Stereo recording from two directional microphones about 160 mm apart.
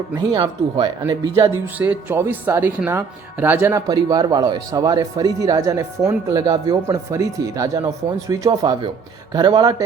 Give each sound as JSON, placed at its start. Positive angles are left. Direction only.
{"t": 0.2, "sound": "speech", "side_deg": -25}
{"t": 1.6, "sound": "speech", "side_deg": -10}